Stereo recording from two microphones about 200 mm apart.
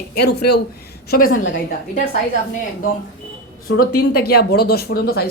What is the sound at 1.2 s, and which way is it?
Speech, 85° left.